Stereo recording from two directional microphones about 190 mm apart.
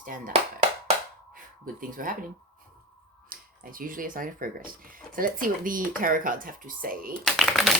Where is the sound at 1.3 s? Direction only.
45° right (ahead or behind).